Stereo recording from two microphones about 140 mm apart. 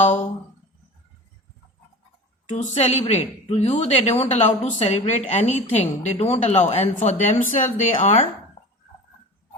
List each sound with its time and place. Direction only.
2.5 s a woman's voice: 55° left (ahead or behind)